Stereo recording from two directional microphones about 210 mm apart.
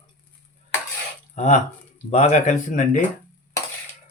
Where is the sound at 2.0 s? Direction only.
35° left (ahead or behind).